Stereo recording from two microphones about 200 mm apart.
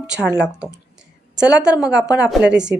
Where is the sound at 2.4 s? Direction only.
60° right (ahead or behind).